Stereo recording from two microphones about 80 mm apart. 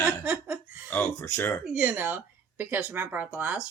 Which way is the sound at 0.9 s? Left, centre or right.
Left.